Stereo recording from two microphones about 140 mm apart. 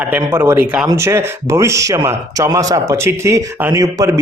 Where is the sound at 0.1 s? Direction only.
20° right (ahead or behind).